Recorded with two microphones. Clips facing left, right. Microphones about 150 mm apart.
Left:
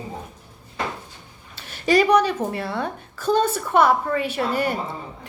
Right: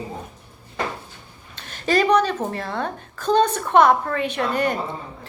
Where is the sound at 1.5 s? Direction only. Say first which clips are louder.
Left 2 dB; 10° left (ahead or behind).